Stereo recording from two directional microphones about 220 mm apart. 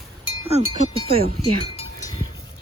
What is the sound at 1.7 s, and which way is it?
Cowbell, 25° left (ahead or behind).